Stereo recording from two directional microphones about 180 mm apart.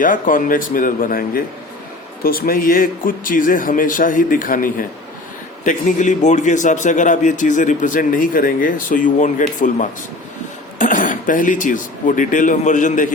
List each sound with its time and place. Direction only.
0.0 s a man's voice: 50° left (ahead or behind)